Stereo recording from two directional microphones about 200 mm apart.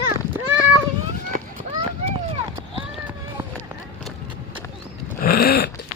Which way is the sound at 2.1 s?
25° right (ahead or behind).